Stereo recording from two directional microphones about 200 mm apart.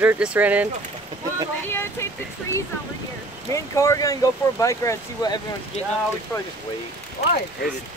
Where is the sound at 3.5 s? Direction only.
15° left (ahead or behind).